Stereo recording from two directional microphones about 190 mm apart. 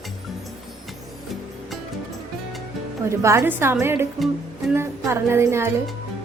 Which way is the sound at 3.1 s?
15° right (ahead or behind).